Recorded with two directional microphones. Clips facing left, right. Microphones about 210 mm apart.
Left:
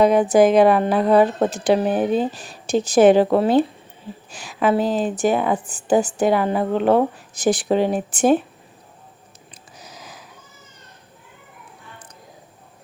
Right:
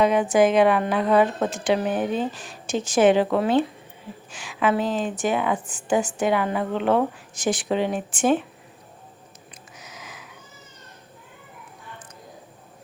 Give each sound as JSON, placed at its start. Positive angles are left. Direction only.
{"t": 0.0, "sound": "a woman's voice", "side_deg": 35}
{"t": 9.7, "sound": "sniff", "side_deg": 35}